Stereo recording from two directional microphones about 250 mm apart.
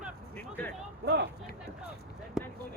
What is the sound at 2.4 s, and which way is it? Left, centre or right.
Basketball bounce, centre.